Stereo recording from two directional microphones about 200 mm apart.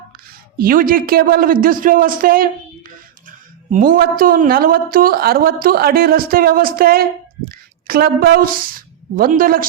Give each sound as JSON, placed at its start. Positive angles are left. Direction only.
{"t": 0.3, "sound": "a man's voice", "side_deg": -45}
{"t": 7.4, "sound": "a sound", "side_deg": -45}
{"t": 9.1, "sound": "a man's voice", "side_deg": -45}